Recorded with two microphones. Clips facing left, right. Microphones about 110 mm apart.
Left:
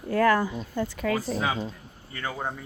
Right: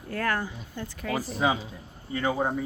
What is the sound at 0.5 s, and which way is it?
Speech, 90° left.